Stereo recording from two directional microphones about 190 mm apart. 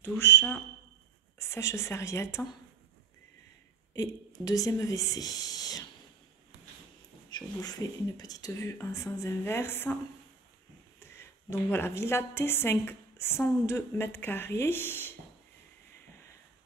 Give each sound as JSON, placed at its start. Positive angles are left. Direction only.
{"t": 0.0, "sound": "a woman's voice", "side_deg": 10}
{"t": 3.9, "sound": "speech", "side_deg": 20}
{"t": 7.2, "sound": "a woman's voice", "side_deg": 20}
{"t": 11.7, "sound": "a woman's voice", "side_deg": 15}